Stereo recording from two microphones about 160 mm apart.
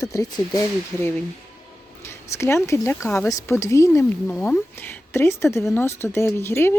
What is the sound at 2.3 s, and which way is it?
Speech, 15° left (ahead or behind).